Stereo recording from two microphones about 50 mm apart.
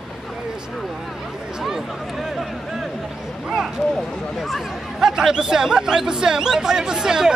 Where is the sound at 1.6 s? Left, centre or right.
Centre.